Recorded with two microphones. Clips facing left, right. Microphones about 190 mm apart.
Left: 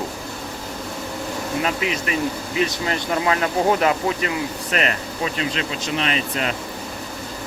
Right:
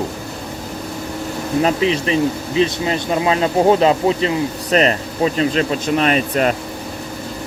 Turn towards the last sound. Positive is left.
turn(degrees=-50)  # may be behind; listen again after turning